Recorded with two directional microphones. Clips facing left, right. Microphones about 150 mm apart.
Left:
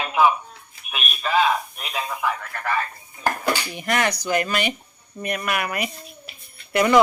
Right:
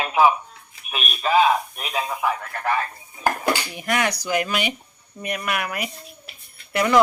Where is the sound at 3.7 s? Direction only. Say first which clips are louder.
Left 1 dB; 5° right (ahead or behind).